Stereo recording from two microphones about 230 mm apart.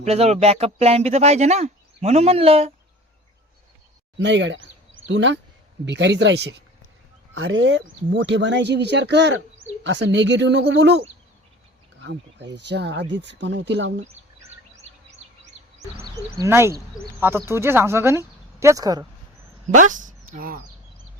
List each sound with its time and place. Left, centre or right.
0.0 s speech: right
4.2 s speech: right
16.4 s speech: centre
19.7 s speech: right